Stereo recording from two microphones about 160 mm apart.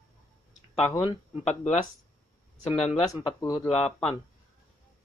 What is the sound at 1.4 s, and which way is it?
Speech, 45° left (ahead or behind).